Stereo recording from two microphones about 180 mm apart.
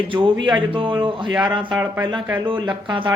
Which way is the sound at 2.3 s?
25° right (ahead or behind).